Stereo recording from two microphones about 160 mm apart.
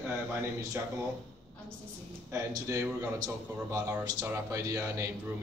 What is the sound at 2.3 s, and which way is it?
Speech, 20° right (ahead or behind).